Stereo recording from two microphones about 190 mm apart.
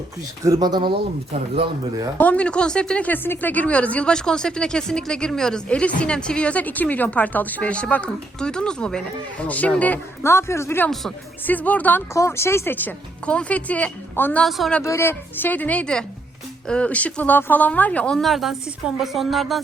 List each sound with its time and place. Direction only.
0.4 s speech: 20° right (ahead or behind)
2.1 s speech: 5° left (ahead or behind)
14.8 s speech: 15° left (ahead or behind)